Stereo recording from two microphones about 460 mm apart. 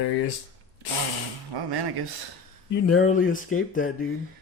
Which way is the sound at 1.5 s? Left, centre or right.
Right.